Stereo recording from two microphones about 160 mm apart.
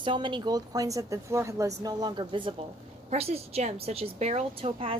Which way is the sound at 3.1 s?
40° right (ahead or behind).